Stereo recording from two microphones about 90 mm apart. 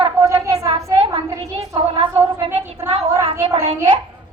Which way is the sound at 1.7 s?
80° right.